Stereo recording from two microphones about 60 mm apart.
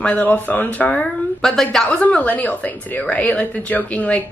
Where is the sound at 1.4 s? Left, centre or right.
Centre.